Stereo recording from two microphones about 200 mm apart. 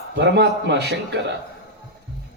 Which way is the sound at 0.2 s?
60° right (ahead or behind).